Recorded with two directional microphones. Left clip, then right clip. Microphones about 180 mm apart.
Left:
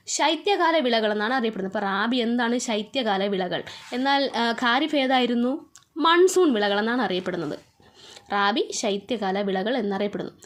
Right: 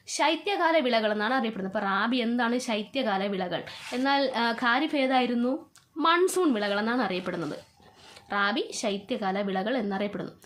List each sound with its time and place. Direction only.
0.1 s a woman's voice: 30° left (ahead or behind)